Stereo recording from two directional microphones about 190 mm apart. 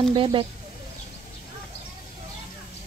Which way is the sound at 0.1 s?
25° right (ahead or behind).